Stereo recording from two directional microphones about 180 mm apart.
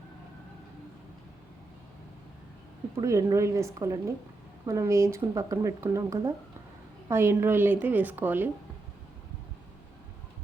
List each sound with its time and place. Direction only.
3.0 s speech: 15° right (ahead or behind)